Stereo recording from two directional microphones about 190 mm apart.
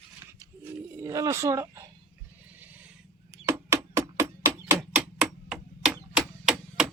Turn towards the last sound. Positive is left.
turn(degrees=-5)  # may be behind; listen again after turning